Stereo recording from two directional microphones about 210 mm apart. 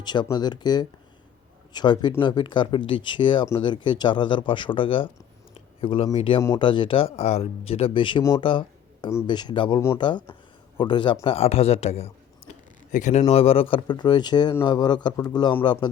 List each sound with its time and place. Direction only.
0.0 s speech: 20° left (ahead or behind)